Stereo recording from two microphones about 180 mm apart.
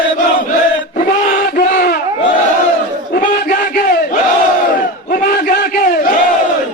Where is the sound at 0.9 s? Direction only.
50° left (ahead or behind).